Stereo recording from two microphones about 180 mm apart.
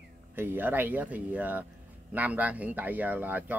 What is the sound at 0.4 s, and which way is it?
Speech, 10° right (ahead or behind).